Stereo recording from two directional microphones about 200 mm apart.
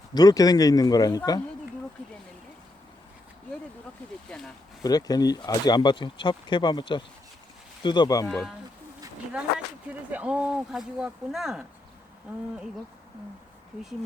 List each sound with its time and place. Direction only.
0.1 s speech: 20° left (ahead or behind)
4.3 s speech: 5° left (ahead or behind)
4.8 s speech: 20° left (ahead or behind)
8.3 s speech: centre (ahead or behind)
10.1 s speech: 10° right (ahead or behind)